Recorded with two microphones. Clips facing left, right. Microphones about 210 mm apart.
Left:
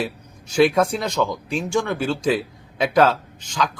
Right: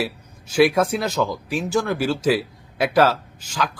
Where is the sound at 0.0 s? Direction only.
5° right (ahead or behind).